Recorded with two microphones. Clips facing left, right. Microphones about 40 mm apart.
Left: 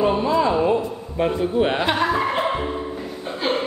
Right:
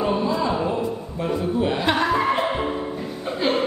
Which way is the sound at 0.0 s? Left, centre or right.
Left.